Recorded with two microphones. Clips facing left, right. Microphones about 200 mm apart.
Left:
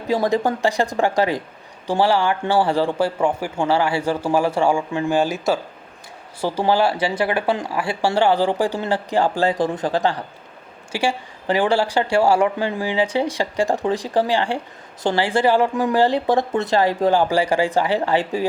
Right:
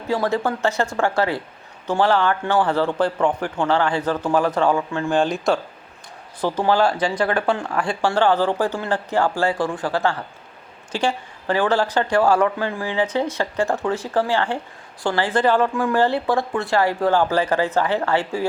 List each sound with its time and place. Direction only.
0.1 s speech: 15° left (ahead or behind)